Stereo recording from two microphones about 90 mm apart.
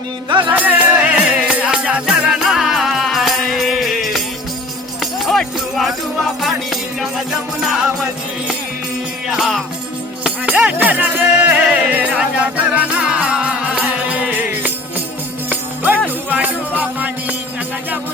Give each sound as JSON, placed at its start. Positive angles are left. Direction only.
{"t": 0.3, "sound": "music", "side_deg": -55}
{"t": 0.5, "sound": "music", "side_deg": -15}
{"t": 7.3, "sound": "music", "side_deg": -5}
{"t": 9.3, "sound": "music", "side_deg": 0}
{"t": 10.2, "sound": "music", "side_deg": -15}